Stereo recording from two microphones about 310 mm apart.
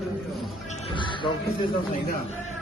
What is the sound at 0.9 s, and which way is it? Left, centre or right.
Music, centre.